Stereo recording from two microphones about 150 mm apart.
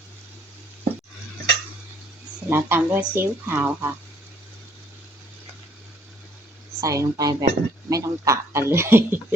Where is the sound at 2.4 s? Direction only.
15° right (ahead or behind).